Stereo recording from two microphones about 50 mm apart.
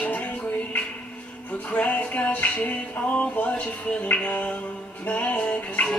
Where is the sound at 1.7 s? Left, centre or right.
Left.